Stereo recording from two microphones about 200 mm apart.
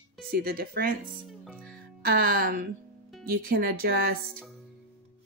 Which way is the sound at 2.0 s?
45° right (ahead or behind).